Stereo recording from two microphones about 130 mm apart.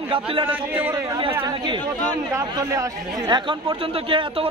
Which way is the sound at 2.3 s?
25° right (ahead or behind).